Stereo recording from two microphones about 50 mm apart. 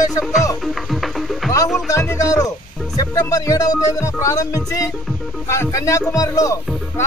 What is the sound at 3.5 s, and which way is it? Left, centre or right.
Music, left.